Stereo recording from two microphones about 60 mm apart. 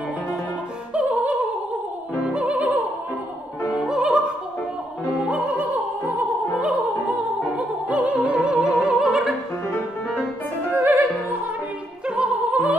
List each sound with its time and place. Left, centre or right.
0.9 s opera: right
3.8 s opera: centre
5.3 s opera: right; by 9.3 s centre
10.7 s opera: right
12.2 s opera: centre